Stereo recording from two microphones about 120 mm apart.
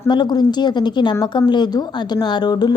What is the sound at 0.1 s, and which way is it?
A woman's voice, 35° left (ahead or behind).